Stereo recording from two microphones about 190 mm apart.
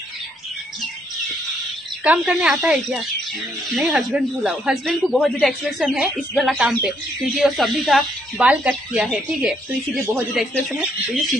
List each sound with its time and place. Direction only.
2.0 s a man's voice: 5° right (ahead or behind)